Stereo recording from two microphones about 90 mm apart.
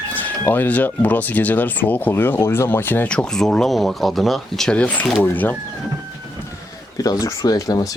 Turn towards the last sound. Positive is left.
turn(degrees=45)  # may be behind; listen again after turning